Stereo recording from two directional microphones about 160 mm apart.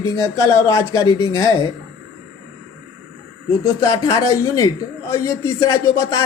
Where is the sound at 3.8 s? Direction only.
20° left (ahead or behind).